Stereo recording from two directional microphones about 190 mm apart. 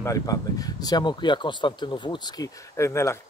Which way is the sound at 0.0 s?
20° left (ahead or behind).